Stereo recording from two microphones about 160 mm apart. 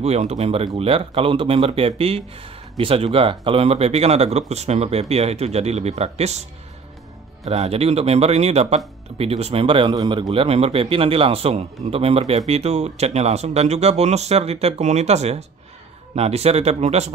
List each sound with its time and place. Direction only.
0.0 s speech: 40° right (ahead or behind)
7.4 s speech: 40° right (ahead or behind)